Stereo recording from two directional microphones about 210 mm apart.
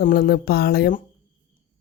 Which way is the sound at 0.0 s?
45° left (ahead or behind).